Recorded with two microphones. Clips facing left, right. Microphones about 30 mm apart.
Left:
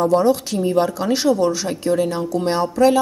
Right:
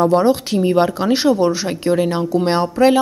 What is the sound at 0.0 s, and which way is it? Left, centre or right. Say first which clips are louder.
Speech: right 2 dB; right.